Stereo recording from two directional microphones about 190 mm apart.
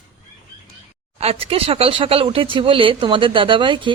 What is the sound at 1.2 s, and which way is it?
Speech, 30° right (ahead or behind).